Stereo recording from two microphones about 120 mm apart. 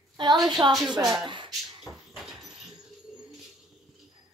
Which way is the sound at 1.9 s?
5° right (ahead or behind).